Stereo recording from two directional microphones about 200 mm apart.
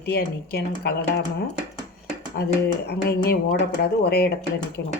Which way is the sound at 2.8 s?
50° left (ahead or behind).